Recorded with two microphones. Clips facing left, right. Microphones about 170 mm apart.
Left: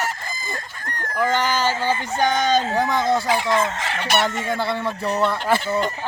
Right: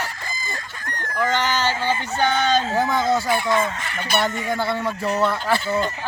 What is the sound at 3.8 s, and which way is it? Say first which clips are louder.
Fowl: left 2 dB; 85° left.